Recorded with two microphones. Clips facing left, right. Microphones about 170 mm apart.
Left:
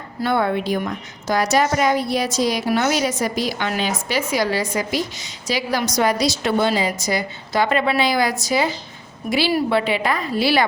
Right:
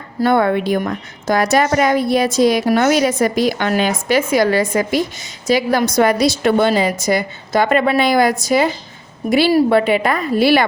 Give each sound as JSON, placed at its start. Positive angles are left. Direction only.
{"t": 0.2, "sound": "a woman's voice", "side_deg": -50}